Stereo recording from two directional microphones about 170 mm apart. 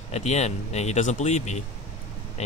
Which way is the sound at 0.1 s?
40° left (ahead or behind).